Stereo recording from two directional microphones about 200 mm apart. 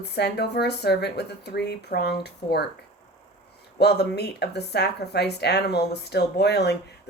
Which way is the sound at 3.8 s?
55° left (ahead or behind).